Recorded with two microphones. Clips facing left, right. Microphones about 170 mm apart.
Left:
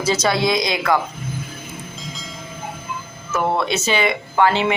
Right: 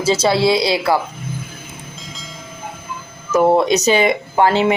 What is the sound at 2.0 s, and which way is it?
Train, centre (ahead or behind).